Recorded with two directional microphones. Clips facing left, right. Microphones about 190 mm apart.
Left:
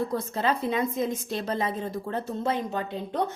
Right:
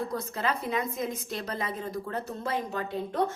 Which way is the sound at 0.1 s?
30° left (ahead or behind).